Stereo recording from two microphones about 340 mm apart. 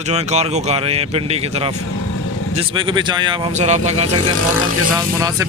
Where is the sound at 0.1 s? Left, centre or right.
Centre.